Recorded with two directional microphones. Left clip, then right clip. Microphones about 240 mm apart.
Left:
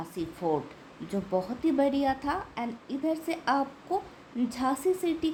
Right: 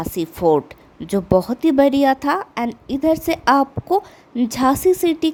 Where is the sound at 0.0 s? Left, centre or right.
Right.